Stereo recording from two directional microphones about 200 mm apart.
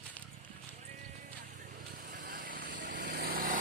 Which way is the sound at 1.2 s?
45° right (ahead or behind).